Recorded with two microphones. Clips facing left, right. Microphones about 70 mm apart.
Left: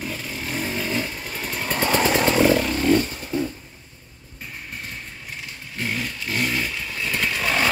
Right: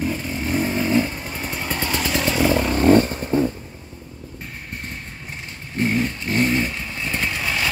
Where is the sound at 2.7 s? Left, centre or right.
Right.